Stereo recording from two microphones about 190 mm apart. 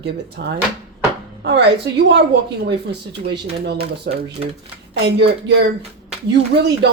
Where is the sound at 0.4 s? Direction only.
55° right (ahead or behind).